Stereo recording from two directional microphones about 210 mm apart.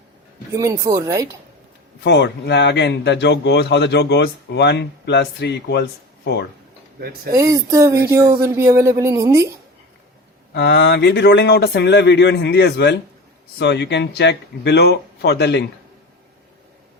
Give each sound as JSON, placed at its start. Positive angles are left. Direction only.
{"t": 0.5, "sound": "speech", "side_deg": -15}
{"t": 2.0, "sound": "a man's voice", "side_deg": 55}
{"t": 7.3, "sound": "speech", "side_deg": -15}
{"t": 10.5, "sound": "a man's voice", "side_deg": 55}